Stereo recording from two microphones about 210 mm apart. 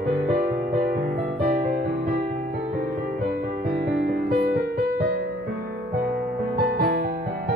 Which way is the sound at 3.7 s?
50° right (ahead or behind).